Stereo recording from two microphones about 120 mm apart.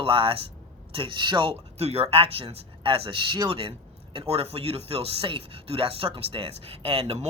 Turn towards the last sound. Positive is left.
turn(degrees=-65)  # may be behind; listen again after turning